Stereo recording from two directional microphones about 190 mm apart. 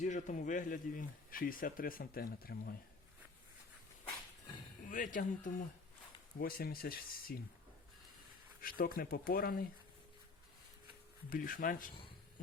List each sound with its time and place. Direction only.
0.0 s speech: 40° left (ahead or behind)
4.9 s speech: 45° left (ahead or behind)
8.6 s speech: 50° left (ahead or behind)
11.3 s speech: 45° left (ahead or behind)